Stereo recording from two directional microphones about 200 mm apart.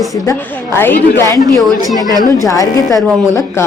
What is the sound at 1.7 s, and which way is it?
Speech, 20° right (ahead or behind).